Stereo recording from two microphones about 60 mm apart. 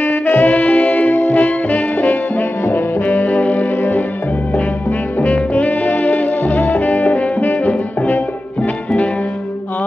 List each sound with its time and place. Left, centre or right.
0.0 s music: left
5.2 s music: left